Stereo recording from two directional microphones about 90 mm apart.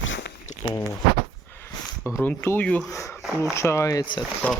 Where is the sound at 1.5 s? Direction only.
25° left (ahead or behind).